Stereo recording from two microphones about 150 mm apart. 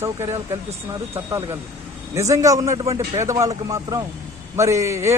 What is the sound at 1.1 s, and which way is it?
Speech, 20° right (ahead or behind).